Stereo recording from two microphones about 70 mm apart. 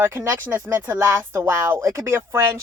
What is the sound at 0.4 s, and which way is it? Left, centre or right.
Speech, right.